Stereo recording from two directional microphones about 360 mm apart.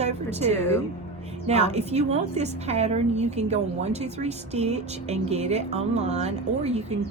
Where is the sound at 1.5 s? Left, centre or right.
Centre.